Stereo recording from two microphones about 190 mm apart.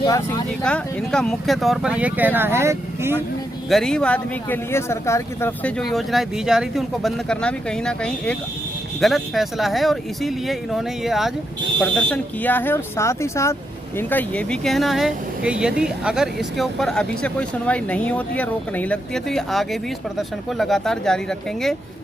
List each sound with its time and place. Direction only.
0.0 s speech: 20° left (ahead or behind)
0.6 s speech: 5° left (ahead or behind); by 3.2 s 15° right (ahead or behind)
3.7 s speech: centre (ahead or behind)